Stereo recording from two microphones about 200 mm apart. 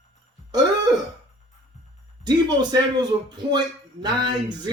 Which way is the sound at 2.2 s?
20° right (ahead or behind).